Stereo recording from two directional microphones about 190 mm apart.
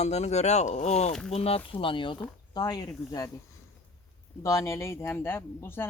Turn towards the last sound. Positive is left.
turn(degrees=10)  # may be behind; listen again after turning